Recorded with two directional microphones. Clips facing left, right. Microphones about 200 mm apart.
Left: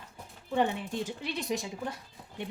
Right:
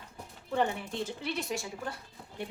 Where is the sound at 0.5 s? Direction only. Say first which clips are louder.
Left 2 dB; 15° left (ahead or behind).